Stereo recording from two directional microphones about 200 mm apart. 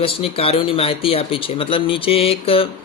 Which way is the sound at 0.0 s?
30° left (ahead or behind).